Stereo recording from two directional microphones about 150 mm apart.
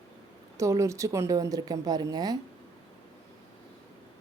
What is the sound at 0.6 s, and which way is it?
A woman's voice, 20° right (ahead or behind).